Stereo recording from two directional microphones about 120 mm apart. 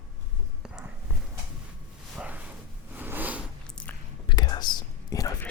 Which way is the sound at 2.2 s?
10° right (ahead or behind).